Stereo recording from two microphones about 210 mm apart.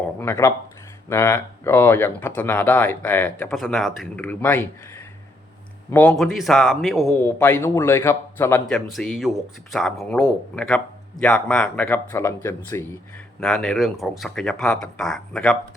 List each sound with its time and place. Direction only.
0.2 s speech: 10° left (ahead or behind)
8.6 s speech: centre (ahead or behind)